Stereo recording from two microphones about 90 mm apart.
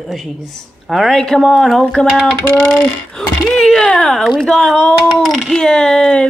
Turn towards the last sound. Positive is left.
turn(degrees=10)  # may be behind; listen again after turning